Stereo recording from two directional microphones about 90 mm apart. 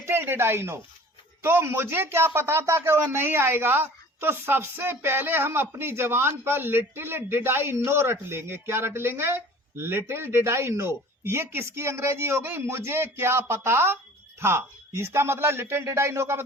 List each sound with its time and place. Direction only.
0.0 s speech: 25° right (ahead or behind)